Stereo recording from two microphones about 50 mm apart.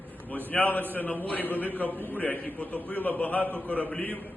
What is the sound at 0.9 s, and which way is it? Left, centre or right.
A man's voice, left.